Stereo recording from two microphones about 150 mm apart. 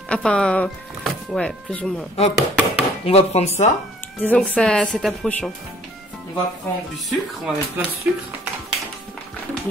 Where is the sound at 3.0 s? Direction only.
45° left (ahead or behind).